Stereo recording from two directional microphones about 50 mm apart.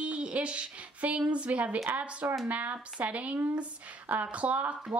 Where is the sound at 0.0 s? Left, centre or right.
Right.